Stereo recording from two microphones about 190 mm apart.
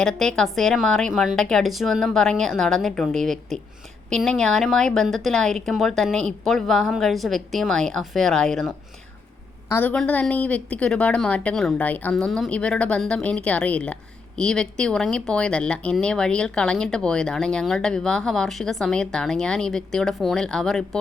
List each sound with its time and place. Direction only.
0.0 s a woman's voice: 5° left (ahead or behind)